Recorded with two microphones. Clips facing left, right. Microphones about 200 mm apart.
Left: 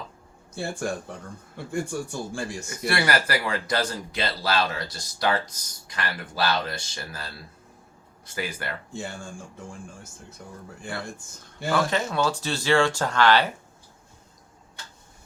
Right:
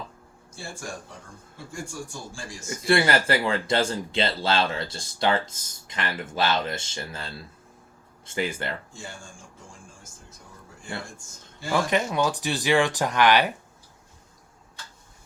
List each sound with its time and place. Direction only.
0.5 s a man's voice: 65° left (ahead or behind)
2.6 s speech: 25° right (ahead or behind)
11.7 s speech: 15° right (ahead or behind)